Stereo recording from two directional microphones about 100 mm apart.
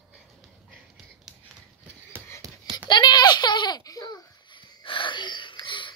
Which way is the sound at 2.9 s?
50° left (ahead or behind).